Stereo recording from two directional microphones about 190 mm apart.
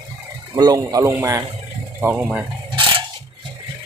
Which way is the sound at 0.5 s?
20° right (ahead or behind).